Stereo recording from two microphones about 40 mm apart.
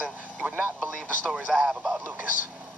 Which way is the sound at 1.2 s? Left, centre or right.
Right.